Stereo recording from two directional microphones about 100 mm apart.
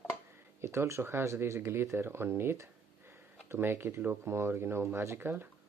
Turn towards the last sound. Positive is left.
turn(degrees=-20)  # may be behind; listen again after turning